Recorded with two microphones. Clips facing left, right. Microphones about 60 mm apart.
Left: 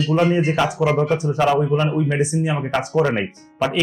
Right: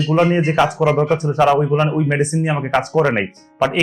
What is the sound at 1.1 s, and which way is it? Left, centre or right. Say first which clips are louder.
Speech: right 3 dB; right.